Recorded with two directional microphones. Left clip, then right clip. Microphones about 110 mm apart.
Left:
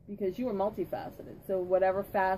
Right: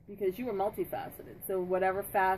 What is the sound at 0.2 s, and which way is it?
A woman's voice, 5° right (ahead or behind).